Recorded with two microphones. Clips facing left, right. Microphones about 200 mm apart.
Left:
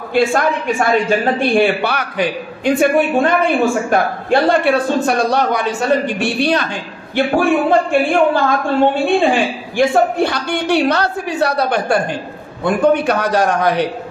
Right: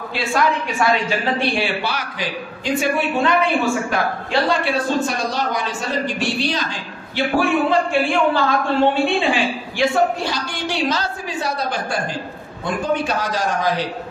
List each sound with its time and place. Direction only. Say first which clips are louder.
0.1 s a man's voice: left 6 dB; 50° left (ahead or behind)